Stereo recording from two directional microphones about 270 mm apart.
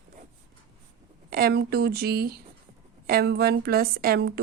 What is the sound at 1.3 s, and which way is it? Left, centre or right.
A woman's voice, right.